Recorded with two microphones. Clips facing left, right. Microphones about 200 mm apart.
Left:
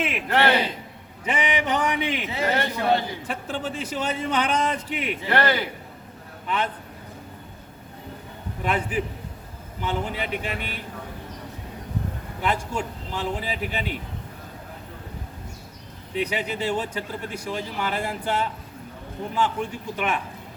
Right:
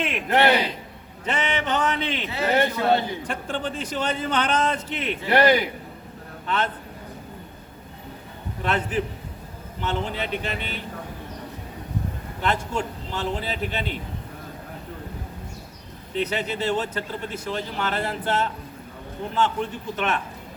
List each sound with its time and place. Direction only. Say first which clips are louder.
0.0 s a sound: even; 5° left (ahead or behind)
0.3 s a man's voice: right 2 dB; 20° right (ahead or behind)
1.2 s speech: left 1 dB; 10° left (ahead or behind)
3.2 s speech: right 1 dB; 5° left (ahead or behind)
5.3 s a man's voice: right 5 dB; 15° right (ahead or behind)
8.6 s speech: right 1 dB; 10° left (ahead or behind)
12.4 s speech: right 1 dB; 10° left (ahead or behind)
16.1 s speech: right 1 dB; 10° left (ahead or behind)
20.0 s speech: right 1 dB; 10° left (ahead or behind)